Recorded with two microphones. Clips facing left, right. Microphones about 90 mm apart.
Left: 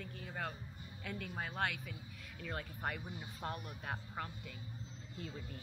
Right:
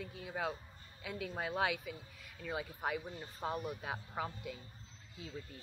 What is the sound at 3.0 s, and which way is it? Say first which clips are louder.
Speech: right 1 dB; 15° left (ahead or behind).